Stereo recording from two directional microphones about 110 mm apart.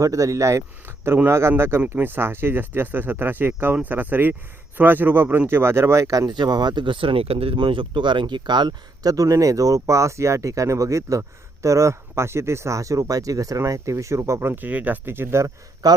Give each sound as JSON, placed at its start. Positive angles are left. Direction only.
{"t": 0.0, "sound": "speech", "side_deg": -30}